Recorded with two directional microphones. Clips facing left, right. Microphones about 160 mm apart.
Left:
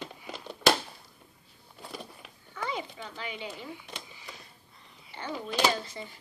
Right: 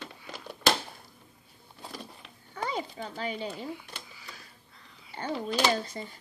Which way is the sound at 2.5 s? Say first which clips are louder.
Right 2 dB; 40° right (ahead or behind).